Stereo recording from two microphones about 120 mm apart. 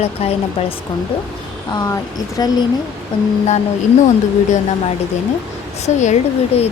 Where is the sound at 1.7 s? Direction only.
30° left (ahead or behind).